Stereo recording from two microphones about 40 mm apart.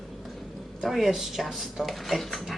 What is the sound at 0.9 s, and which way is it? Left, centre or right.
Speech, centre.